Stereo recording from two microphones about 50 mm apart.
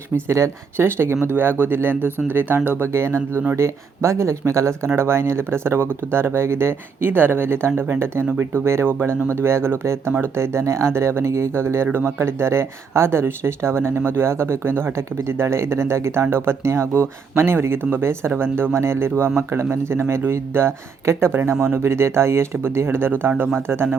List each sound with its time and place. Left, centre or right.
0.3 s speech: right
1.3 s speech: right
2.8 s speech: right
4.9 s speech: right
18.3 s speech: right